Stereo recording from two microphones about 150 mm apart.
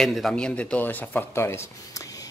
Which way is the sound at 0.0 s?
Centre (ahead or behind).